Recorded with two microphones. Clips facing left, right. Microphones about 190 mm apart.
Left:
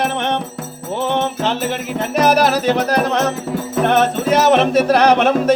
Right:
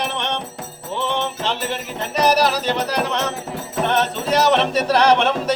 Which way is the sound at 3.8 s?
50° left (ahead or behind).